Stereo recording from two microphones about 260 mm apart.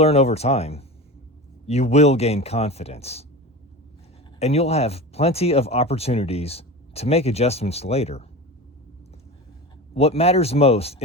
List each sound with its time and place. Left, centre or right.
0.0 s speech: left
4.4 s speech: left
9.9 s speech: left